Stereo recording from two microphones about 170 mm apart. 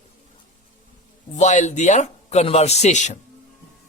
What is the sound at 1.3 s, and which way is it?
Speech, 45° left (ahead or behind).